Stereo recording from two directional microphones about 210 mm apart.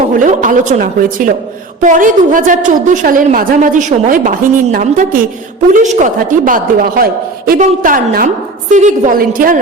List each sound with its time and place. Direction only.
0.1 s a woman's voice: 40° right (ahead or behind)